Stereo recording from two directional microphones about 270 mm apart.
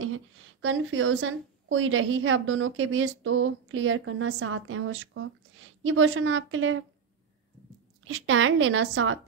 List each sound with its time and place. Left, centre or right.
0.0 s a woman's voice: right
8.1 s a woman's voice: right